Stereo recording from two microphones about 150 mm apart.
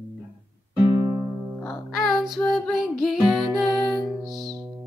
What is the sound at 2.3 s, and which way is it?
Music, centre (ahead or behind).